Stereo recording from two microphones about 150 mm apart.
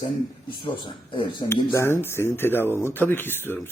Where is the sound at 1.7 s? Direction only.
15° left (ahead or behind).